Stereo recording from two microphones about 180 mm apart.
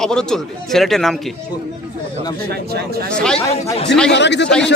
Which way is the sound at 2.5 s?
60° right (ahead or behind).